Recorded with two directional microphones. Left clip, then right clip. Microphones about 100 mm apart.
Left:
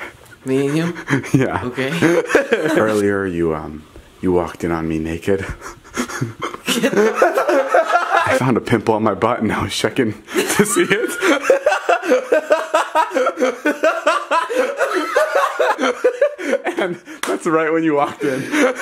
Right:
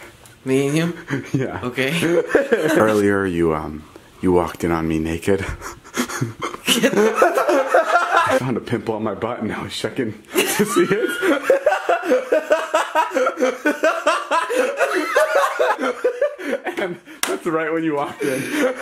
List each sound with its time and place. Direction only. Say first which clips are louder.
0.5 s speech: left 1 dB; centre (ahead or behind)
1.0 s speech: left 6 dB; 50° left (ahead or behind)
1.6 s speech: even; 5° right (ahead or behind)
2.0 s speech: left 4 dB; 45° left (ahead or behind)
2.6 s speech: even; 5° right (ahead or behind)
5.9 s laughter: left 1 dB; centre (ahead or behind)
8.5 s speech: left 7 dB; 55° left (ahead or behind)
10.3 s a sound: even; centre (ahead or behind)
11.1 s chuckle: left 3 dB; 40° left (ahead or behind); by 15.6 s centre (ahead or behind)
15.8 s chuckle: left 4 dB; 30° left (ahead or behind)
18.2 s speech: left 2 dB; 5° right (ahead or behind)
18.5 s chuckle: left 6 dB; 35° left (ahead or behind)